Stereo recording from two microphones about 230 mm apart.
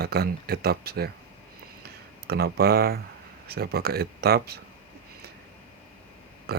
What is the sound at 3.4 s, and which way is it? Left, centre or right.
Speech, right.